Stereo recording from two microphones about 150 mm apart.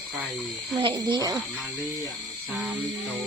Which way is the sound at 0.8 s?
30° right (ahead or behind).